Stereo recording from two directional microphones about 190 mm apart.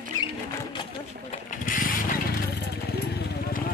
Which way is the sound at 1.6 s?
45° left (ahead or behind).